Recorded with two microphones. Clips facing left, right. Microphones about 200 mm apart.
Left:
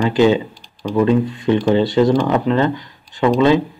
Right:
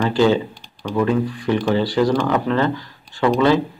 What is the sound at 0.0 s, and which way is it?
Speech, 15° left (ahead or behind).